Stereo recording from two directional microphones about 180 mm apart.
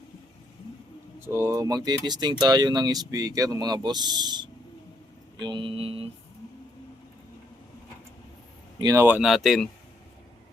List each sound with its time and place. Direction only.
1.2 s speech: 15° right (ahead or behind)
5.4 s mantra: 25° right (ahead or behind)
8.8 s speech: 15° right (ahead or behind); by 9.6 s centre (ahead or behind)